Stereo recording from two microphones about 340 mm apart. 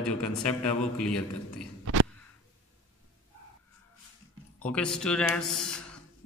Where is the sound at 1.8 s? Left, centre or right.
Right.